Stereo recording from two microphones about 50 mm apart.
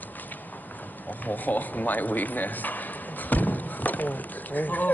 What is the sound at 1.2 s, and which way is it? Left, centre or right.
Speech, left.